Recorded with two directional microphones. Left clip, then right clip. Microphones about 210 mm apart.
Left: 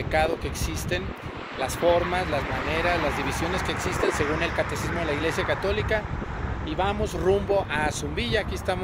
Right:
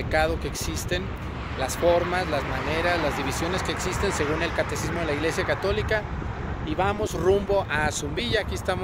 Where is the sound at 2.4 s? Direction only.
50° right (ahead or behind).